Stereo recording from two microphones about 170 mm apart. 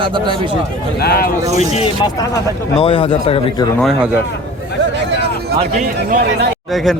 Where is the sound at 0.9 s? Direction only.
65° left (ahead or behind).